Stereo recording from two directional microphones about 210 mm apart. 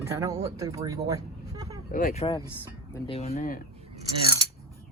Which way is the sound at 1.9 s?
40° left (ahead or behind).